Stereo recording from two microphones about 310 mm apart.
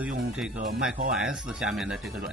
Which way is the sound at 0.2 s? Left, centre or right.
Centre.